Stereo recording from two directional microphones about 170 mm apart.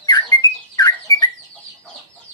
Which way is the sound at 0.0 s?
25° left (ahead or behind).